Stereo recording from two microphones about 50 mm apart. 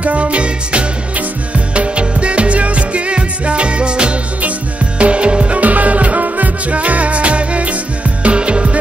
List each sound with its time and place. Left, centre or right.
0.0 s music: right